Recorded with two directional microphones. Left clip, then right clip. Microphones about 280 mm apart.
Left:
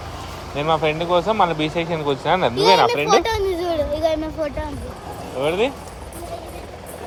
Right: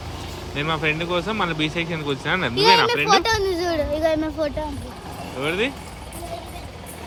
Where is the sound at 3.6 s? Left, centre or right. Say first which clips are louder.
Left 2 dB; right.